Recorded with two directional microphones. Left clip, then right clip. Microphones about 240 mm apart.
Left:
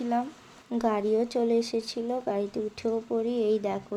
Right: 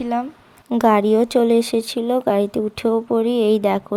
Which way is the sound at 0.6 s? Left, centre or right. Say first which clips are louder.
Right 11 dB; right.